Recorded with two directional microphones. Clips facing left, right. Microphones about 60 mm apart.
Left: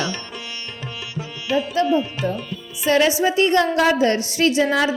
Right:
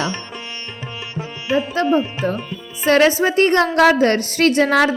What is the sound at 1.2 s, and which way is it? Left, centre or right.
Music, right.